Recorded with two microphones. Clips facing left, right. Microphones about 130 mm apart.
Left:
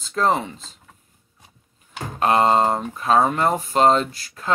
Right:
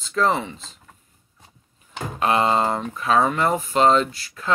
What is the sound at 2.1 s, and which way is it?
Speech, 40° left (ahead or behind).